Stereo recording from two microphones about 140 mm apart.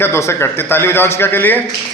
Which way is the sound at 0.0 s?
20° left (ahead or behind).